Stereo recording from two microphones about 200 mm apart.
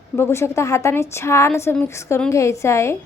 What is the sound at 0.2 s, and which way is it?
A woman's voice, 10° left (ahead or behind).